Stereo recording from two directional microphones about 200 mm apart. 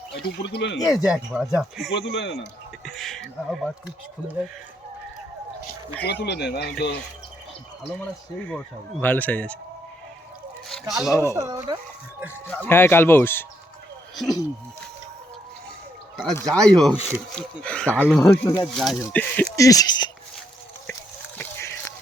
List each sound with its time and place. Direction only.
0.3 s speech: 60° left (ahead or behind)
0.9 s speech: 5° right (ahead or behind)
2.0 s speech: 60° left (ahead or behind)
2.8 s speech: centre (ahead or behind)
6.1 s speech: 55° left (ahead or behind)
8.4 s speech: 10° left (ahead or behind)
10.7 s a sound: centre (ahead or behind)
11.1 s speech: 15° left (ahead or behind)
11.3 s speech: 15° right (ahead or behind)
12.5 s speech: 10° left (ahead or behind)
16.3 s speech: 5° left (ahead or behind)
18.8 s speech: centre (ahead or behind)
19.0 s speech: 10° left (ahead or behind)
21.3 s a sound: 10° left (ahead or behind)